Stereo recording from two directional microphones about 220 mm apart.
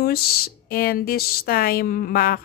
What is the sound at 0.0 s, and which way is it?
Speech, 45° left (ahead or behind).